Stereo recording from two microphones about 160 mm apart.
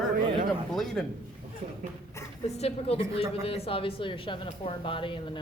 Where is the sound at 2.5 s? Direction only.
40° left (ahead or behind).